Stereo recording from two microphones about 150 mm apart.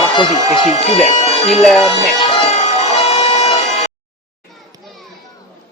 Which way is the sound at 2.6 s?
45° left (ahead or behind).